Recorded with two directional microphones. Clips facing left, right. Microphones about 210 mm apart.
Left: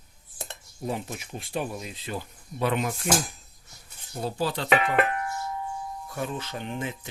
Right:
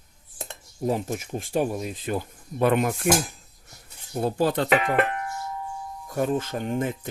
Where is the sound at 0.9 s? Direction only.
40° right (ahead or behind).